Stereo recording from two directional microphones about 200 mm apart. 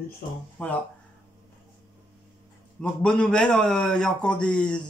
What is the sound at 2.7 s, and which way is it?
A man's voice, 5° left (ahead or behind).